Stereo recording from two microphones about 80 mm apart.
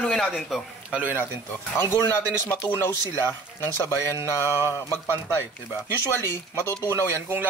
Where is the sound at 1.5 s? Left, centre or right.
Left.